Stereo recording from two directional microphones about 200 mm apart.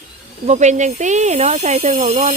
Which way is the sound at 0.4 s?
35° right (ahead or behind).